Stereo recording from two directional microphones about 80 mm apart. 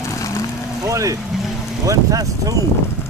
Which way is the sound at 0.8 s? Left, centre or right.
Right.